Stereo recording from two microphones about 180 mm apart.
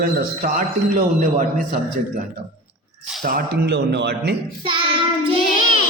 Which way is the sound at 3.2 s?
50° right (ahead or behind).